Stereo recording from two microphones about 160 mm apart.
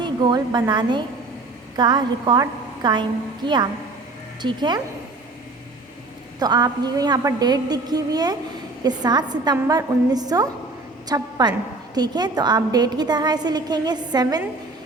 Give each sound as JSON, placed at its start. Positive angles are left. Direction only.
{"t": 0.0, "sound": "a woman's voice", "side_deg": -25}
{"t": 6.4, "sound": "a woman's voice", "side_deg": -25}